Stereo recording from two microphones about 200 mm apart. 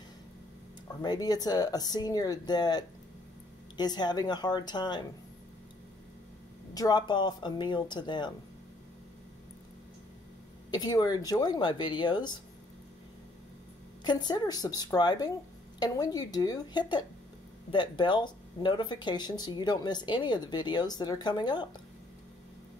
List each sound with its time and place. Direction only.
1.0 s speech: 20° left (ahead or behind)
6.7 s speech: 20° left (ahead or behind)
10.7 s speech: 20° left (ahead or behind)
14.0 s speech: 20° left (ahead or behind)